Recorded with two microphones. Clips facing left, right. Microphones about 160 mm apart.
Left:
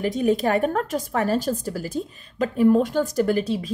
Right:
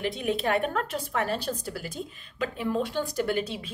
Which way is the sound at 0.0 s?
40° left (ahead or behind).